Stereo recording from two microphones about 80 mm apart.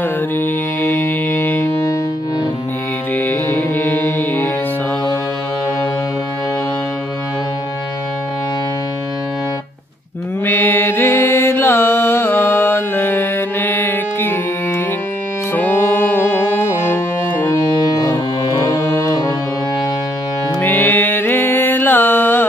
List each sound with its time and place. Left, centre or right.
0.4 s mantra: left
3.2 s music: left
10.4 s mantra: left
15.5 s music: left
17.5 s music: left
20.6 s music: left